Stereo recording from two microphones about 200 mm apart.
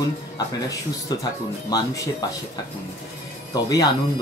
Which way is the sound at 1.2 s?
20° left (ahead or behind).